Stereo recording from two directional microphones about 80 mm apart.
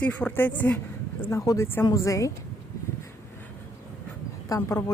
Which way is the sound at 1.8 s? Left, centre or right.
Left.